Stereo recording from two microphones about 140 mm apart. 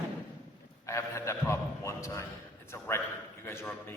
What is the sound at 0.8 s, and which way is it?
A man's voice, 20° left (ahead or behind).